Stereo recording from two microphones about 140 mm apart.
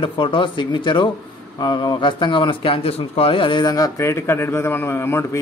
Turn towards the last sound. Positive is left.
turn(degrees=20)  # may be behind; listen again after turning